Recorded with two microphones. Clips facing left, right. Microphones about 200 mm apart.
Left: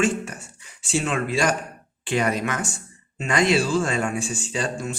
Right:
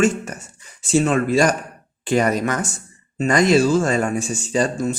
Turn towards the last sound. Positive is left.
turn(degrees=-40)  # may be behind; listen again after turning